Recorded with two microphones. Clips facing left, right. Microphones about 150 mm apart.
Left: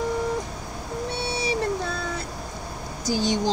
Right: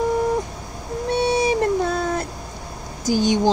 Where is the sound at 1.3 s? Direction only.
50° right (ahead or behind).